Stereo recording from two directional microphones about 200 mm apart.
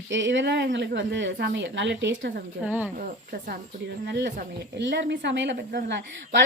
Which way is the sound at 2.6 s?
10° right (ahead or behind).